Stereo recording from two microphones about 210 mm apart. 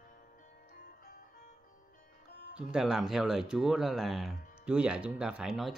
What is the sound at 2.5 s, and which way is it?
Speech, 5° right (ahead or behind).